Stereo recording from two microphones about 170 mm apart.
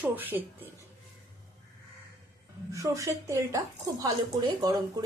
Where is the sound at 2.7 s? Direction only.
20° right (ahead or behind).